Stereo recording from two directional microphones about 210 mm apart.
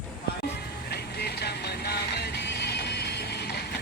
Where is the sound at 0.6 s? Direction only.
50° left (ahead or behind).